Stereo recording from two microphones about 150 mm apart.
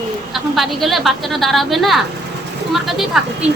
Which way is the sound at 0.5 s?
Centre (ahead or behind).